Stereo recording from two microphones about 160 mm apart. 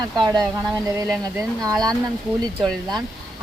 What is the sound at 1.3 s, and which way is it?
Speech, 20° right (ahead or behind).